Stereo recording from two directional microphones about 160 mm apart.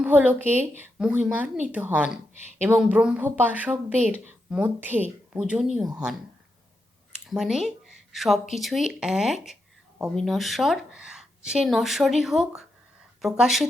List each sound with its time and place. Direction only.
0.0 s speech: 10° right (ahead or behind)
7.3 s a woman's voice: centre (ahead or behind)